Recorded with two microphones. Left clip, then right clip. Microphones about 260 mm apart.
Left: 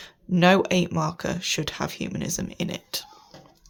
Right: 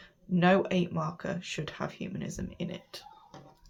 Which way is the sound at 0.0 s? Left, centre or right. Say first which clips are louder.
Left 7 dB; left.